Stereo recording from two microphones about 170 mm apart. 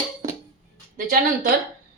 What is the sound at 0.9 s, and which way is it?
Speech, 55° right (ahead or behind).